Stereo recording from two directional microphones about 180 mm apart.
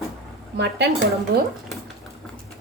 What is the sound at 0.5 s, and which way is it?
Speech, 65° right (ahead or behind).